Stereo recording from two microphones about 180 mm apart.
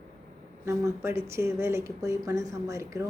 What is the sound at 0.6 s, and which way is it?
Speech, 15° right (ahead or behind).